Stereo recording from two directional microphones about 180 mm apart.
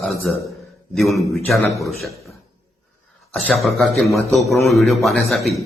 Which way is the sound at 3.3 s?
5° left (ahead or behind).